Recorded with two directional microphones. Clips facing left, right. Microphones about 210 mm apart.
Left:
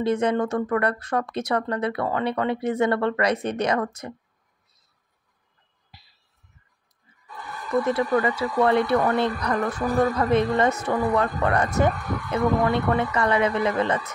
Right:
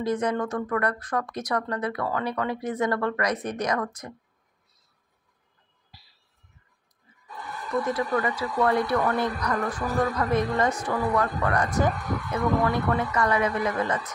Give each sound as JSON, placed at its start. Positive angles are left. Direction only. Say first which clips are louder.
{"t": 0.0, "sound": "speech", "louder": "left 4 dB", "side_deg": 25}
{"t": 7.8, "sound": "speech", "louder": "left 4 dB", "side_deg": 25}